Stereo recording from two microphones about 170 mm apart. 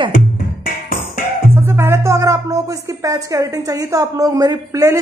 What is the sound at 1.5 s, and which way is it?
Speech, 15° right (ahead or behind).